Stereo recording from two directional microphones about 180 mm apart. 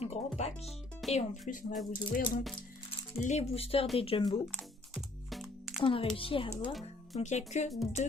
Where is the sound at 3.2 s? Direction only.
35° left (ahead or behind).